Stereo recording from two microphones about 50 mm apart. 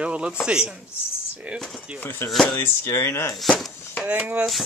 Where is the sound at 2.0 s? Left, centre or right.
Left.